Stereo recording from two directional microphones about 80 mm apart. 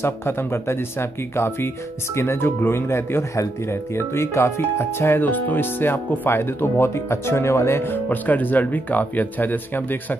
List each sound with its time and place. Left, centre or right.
0.0 s speech: left